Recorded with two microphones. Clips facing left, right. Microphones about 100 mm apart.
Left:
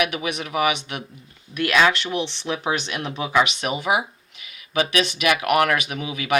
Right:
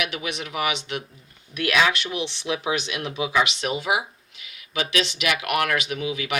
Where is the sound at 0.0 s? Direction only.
50° left (ahead or behind).